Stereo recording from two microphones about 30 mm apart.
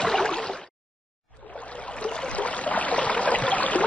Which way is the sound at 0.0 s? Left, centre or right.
Left.